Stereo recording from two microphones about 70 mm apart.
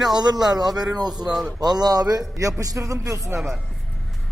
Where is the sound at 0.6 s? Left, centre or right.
Right.